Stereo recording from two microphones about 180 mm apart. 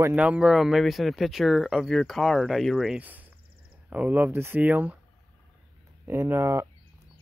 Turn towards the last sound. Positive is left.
turn(degrees=-15)  # may be behind; listen again after turning